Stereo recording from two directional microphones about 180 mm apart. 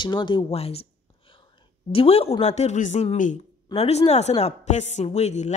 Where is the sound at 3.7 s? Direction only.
35° left (ahead or behind).